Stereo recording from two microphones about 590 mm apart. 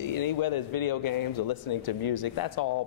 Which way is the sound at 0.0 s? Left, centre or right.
Left.